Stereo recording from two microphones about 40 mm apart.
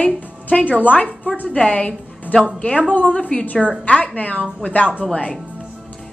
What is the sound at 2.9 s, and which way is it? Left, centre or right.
A woman's voice, left.